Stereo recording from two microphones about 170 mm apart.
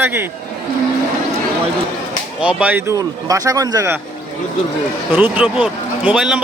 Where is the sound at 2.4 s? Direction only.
5° right (ahead or behind).